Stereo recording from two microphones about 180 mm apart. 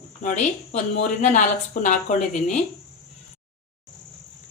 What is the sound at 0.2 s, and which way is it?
A woman's voice, 45° left (ahead or behind).